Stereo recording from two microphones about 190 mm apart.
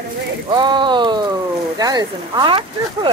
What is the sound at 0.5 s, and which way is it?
Speech, 25° right (ahead or behind).